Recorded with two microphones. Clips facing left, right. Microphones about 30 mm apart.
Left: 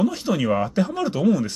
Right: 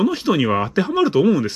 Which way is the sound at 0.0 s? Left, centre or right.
Right.